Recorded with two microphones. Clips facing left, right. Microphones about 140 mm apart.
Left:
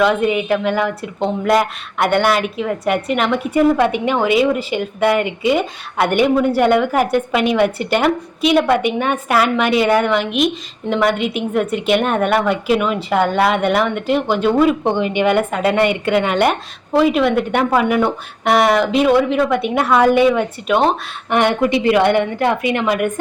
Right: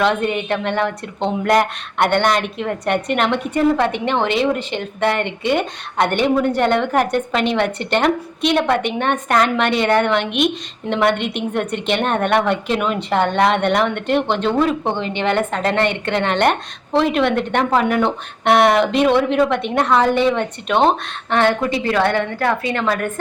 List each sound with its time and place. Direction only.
0.0 s a woman's voice: 5° left (ahead or behind)
21.3 s a woman's voice: 15° left (ahead or behind)